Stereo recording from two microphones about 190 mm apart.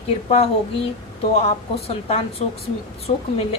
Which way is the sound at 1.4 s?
30° left (ahead or behind).